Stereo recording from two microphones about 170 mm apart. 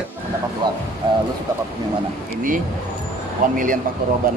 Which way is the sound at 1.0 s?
30° right (ahead or behind).